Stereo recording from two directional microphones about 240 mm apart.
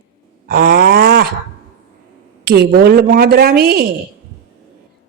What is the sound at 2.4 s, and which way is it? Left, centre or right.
A woman's voice, right.